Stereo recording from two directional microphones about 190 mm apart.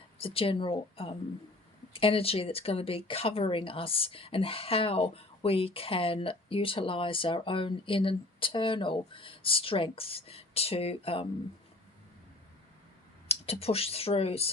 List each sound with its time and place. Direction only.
0.2 s speech: 30° left (ahead or behind)
13.2 s speech: 30° left (ahead or behind)